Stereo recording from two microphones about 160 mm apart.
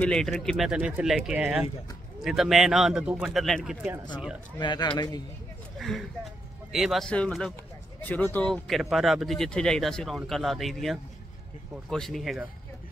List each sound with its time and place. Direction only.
0.0 s speech: 5° left (ahead or behind)
4.6 s speech: 30° left (ahead or behind)
5.8 s speech: centre (ahead or behind)
8.5 s speech: centre (ahead or behind)